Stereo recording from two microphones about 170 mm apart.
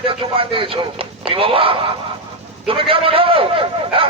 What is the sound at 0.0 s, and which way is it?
A man's voice, 30° right (ahead or behind).